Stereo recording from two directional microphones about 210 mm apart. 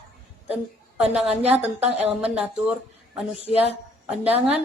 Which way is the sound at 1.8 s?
30° right (ahead or behind).